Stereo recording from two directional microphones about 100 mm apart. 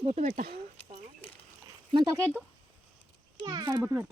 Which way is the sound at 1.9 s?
40° right (ahead or behind).